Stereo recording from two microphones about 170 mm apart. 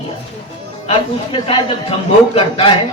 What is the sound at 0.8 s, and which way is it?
Speech, 35° left (ahead or behind).